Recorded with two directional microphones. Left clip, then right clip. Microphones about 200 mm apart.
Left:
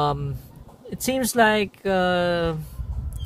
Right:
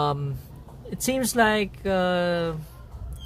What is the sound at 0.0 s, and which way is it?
A man's voice, 10° left (ahead or behind).